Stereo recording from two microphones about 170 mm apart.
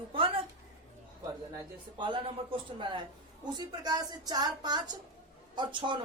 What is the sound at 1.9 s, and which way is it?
Speech, 30° right (ahead or behind).